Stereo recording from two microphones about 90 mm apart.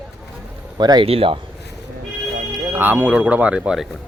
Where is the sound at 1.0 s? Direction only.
90° right.